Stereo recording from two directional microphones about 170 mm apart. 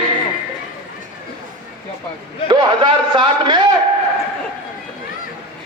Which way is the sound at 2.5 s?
25° right (ahead or behind).